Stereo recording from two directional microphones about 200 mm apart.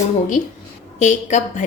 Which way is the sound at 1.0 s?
35° left (ahead or behind).